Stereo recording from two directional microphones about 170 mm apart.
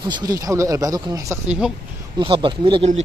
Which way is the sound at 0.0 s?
25° right (ahead or behind).